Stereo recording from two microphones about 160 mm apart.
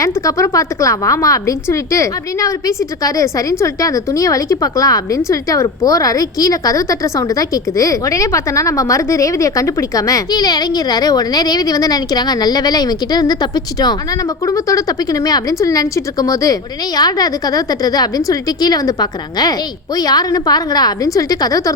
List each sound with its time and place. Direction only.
0.0 s a woman's voice: 20° left (ahead or behind)